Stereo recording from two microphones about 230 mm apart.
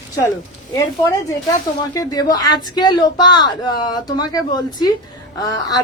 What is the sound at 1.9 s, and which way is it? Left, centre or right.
Speech, centre.